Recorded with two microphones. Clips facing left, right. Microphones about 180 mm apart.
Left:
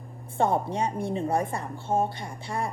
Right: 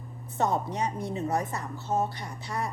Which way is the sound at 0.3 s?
25° left (ahead or behind).